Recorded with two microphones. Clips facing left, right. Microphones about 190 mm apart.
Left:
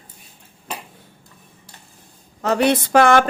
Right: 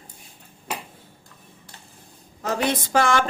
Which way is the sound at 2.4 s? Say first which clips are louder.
Left 7 dB; 70° left (ahead or behind).